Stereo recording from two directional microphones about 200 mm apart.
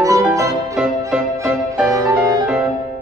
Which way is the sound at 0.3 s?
15° right (ahead or behind).